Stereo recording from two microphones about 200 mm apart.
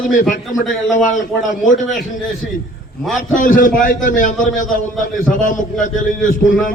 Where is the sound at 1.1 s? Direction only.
40° left (ahead or behind).